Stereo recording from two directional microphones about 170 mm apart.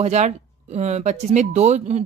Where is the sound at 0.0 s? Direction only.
40° right (ahead or behind).